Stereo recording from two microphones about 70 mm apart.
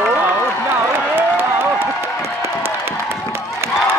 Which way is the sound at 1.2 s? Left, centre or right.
Right.